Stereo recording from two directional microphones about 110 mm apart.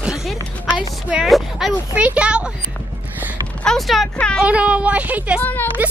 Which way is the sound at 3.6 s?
5° left (ahead or behind).